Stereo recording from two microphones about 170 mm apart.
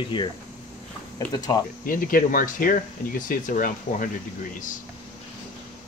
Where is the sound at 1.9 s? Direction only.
55° left (ahead or behind).